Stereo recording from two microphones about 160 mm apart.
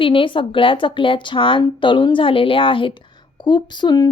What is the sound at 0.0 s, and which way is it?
A woman's voice, 30° left (ahead or behind).